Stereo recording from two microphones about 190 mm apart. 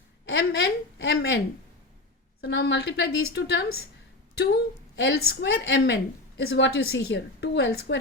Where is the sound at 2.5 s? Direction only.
65° left (ahead or behind).